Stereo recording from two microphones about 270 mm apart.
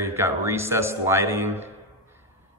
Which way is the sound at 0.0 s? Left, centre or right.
Centre.